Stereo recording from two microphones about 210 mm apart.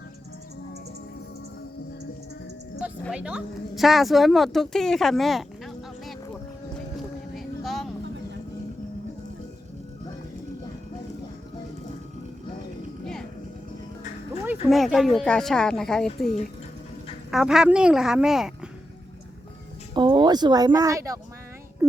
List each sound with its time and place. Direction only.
3.1 s a woman's voice: 5° right (ahead or behind)
7.3 s a sound: centre (ahead or behind)
14.4 s speech: 5° right (ahead or behind)
17.3 s a woman's voice: centre (ahead or behind)
19.9 s a child's voice: 20° right (ahead or behind)
21.8 s a sound: 15° right (ahead or behind)